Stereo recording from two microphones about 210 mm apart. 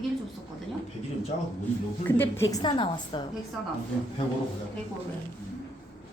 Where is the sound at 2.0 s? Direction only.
10° left (ahead or behind).